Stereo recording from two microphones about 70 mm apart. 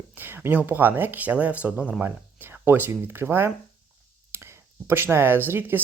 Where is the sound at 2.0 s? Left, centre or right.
Right.